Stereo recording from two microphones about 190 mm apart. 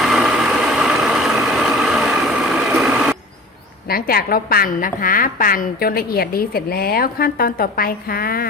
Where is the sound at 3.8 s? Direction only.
50° left (ahead or behind).